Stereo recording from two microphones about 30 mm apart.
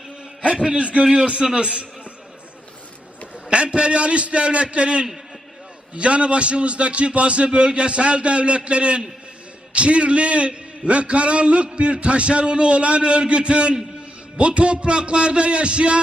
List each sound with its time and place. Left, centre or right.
0.4 s a man's voice: right
3.5 s a man's voice: right